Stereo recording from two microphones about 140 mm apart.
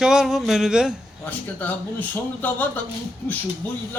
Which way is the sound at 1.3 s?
10° left (ahead or behind).